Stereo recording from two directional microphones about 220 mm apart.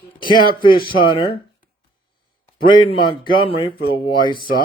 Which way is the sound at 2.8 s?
25° left (ahead or behind).